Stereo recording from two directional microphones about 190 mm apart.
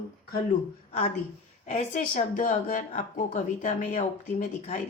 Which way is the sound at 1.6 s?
40° left (ahead or behind).